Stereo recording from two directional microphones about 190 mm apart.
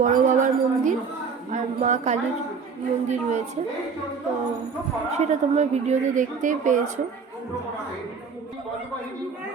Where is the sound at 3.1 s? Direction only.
40° right (ahead or behind).